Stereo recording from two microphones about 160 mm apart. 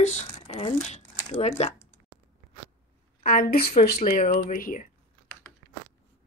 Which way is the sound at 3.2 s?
70° left (ahead or behind).